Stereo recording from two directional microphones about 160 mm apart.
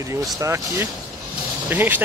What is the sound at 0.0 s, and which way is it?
Speech, 20° right (ahead or behind).